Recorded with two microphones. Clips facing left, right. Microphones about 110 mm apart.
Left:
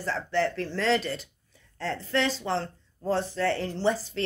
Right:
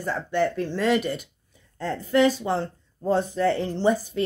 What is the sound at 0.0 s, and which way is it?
Speech, 15° right (ahead or behind).